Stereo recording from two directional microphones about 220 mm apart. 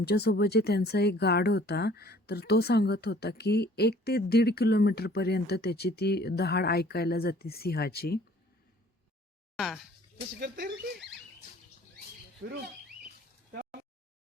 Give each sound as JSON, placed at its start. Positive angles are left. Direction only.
{"t": 0.0, "sound": "speech", "side_deg": 45}
{"t": 9.6, "sound": "speech", "side_deg": 0}